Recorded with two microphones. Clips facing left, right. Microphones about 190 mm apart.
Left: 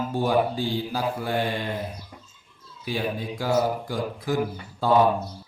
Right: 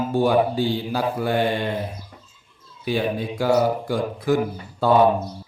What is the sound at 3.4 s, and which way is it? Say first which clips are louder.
Speech: right 4 dB; 70° right (ahead or behind).